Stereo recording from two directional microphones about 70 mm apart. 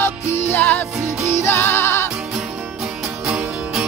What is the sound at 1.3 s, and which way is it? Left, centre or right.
Music, left.